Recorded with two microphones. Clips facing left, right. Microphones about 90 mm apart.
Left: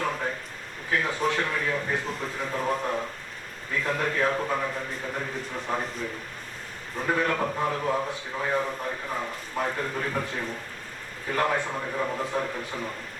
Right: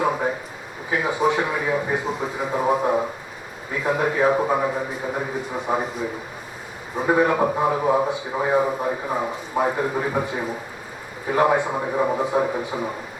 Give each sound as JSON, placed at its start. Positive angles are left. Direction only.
{"t": 0.0, "sound": "a sound", "side_deg": -15}
{"t": 0.9, "sound": "a man's voice", "side_deg": -10}
{"t": 11.8, "sound": "a man's voice", "side_deg": -25}